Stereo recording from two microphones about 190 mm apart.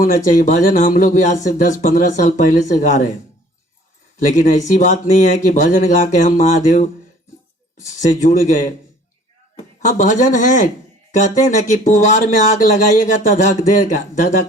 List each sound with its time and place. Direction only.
0.0 s speech: 45° left (ahead or behind)
4.2 s speech: 40° left (ahead or behind)
8.0 s speech: 40° left (ahead or behind)
9.8 s speech: 40° left (ahead or behind)